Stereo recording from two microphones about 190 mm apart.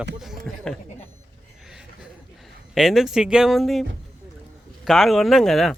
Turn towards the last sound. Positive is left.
turn(degrees=0)  # may be behind; listen again after turning